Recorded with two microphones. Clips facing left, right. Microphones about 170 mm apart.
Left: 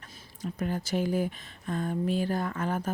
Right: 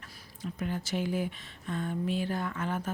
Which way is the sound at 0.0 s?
40° left (ahead or behind).